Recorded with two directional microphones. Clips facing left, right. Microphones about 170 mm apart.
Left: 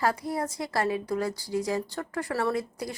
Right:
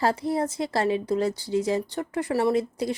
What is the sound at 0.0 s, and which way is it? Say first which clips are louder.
A woman's voice: right 4 dB; 25° right (ahead or behind).